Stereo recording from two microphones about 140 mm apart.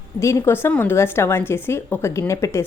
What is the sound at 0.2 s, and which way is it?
A woman's voice, 20° left (ahead or behind).